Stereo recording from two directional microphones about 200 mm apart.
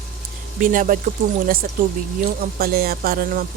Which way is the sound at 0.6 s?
45° right (ahead or behind).